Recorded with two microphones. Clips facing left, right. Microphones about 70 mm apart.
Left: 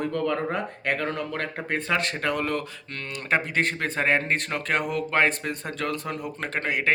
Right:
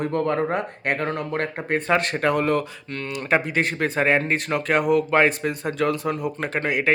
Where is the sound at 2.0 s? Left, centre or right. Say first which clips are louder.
Right 5 dB; right.